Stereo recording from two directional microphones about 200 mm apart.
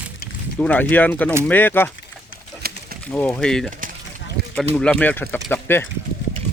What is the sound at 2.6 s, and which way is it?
Bird, 50° right (ahead or behind).